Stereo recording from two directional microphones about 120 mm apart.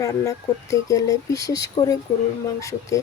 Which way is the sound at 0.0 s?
25° left (ahead or behind).